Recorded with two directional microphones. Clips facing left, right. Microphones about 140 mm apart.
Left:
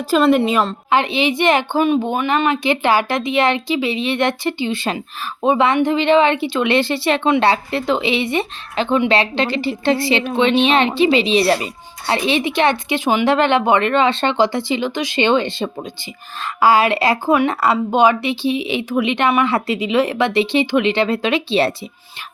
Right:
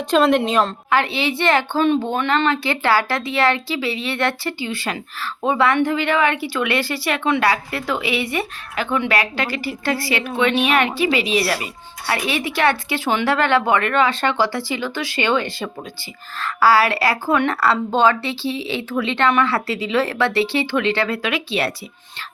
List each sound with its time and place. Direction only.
0.1 s a woman's voice: 5° left (ahead or behind)
0.9 s speech: 20° left (ahead or behind)